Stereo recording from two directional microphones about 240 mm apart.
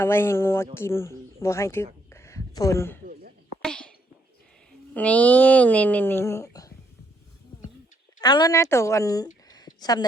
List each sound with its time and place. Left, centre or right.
0.0 s speech: centre
4.9 s speech: centre
8.2 s a woman's voice: centre